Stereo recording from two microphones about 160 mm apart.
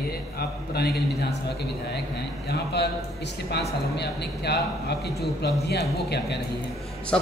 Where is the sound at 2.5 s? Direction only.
90° left.